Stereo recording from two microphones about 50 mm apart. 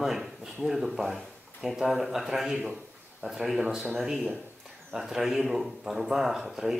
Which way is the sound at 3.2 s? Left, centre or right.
Right.